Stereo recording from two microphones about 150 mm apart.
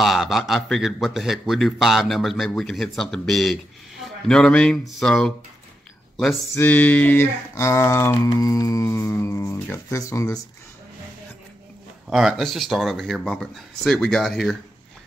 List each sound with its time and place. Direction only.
0.0 s a man's voice: centre (ahead or behind)
6.5 s speech: 10° left (ahead or behind)
12.1 s a man's voice: centre (ahead or behind)